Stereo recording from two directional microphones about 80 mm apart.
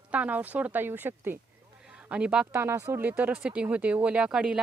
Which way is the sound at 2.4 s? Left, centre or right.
Right.